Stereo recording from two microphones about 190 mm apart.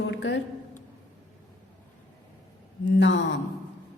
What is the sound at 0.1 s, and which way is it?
Speech, 70° left (ahead or behind).